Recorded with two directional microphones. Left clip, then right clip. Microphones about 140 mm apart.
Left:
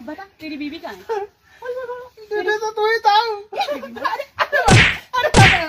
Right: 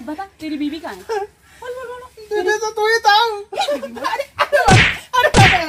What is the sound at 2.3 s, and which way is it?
Speech, centre (ahead or behind).